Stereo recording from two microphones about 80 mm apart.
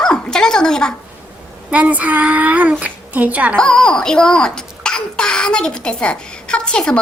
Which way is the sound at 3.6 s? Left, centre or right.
Centre.